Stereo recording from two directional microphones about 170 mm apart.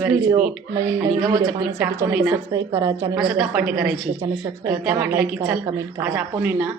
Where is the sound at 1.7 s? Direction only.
15° right (ahead or behind).